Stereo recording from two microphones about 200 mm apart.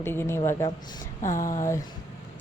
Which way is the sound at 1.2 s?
40° left (ahead or behind).